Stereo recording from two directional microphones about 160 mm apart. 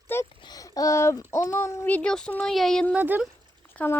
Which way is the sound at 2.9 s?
10° right (ahead or behind).